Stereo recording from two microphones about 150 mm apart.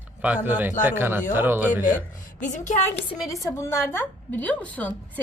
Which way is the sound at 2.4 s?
55° left (ahead or behind).